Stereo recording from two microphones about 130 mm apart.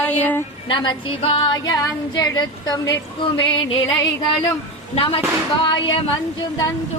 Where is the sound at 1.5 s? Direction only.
30° left (ahead or behind).